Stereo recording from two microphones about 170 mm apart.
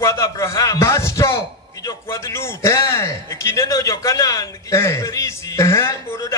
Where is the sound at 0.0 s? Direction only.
15° left (ahead or behind).